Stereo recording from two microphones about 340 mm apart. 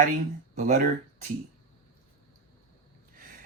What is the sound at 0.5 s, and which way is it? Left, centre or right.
Speech, right.